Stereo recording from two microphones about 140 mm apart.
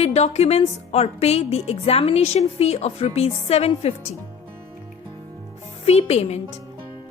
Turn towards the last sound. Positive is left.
turn(degrees=50)  # may be behind; listen again after turning